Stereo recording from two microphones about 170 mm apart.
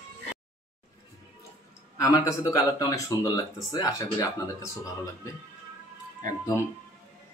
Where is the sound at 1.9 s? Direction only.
20° left (ahead or behind).